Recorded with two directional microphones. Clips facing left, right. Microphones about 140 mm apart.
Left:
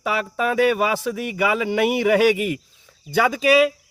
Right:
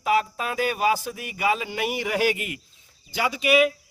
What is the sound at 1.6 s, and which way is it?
Speech, 65° left (ahead or behind).